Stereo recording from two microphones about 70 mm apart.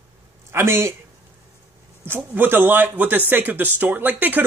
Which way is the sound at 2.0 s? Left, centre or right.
Right.